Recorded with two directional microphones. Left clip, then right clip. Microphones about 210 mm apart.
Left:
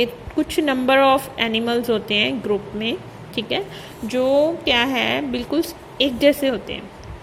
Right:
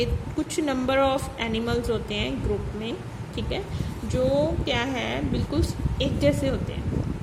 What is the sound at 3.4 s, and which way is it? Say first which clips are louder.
A woman's voice: left 8 dB; 15° left (ahead or behind).